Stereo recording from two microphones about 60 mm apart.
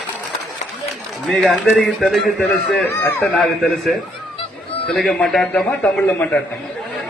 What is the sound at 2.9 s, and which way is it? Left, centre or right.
Speech, left.